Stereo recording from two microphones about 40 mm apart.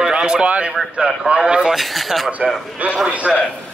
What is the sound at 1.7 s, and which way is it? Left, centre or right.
Speech, centre.